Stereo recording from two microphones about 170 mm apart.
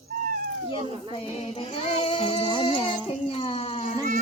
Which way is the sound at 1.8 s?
35° left (ahead or behind).